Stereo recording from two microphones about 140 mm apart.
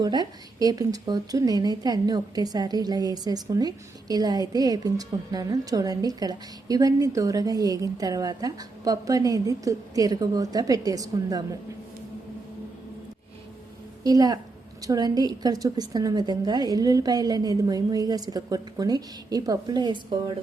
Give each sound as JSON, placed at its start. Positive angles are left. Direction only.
{"t": 0.0, "sound": "speech", "side_deg": -30}
{"t": 14.0, "sound": "speech", "side_deg": -25}